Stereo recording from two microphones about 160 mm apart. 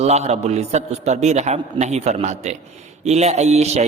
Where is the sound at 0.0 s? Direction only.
40° right (ahead or behind).